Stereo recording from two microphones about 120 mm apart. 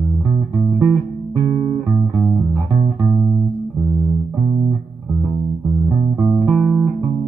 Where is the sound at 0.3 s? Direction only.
30° right (ahead or behind).